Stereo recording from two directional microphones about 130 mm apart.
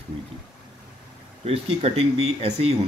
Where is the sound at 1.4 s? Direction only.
50° right (ahead or behind).